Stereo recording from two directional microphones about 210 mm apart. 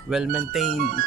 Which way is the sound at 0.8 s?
45° right (ahead or behind).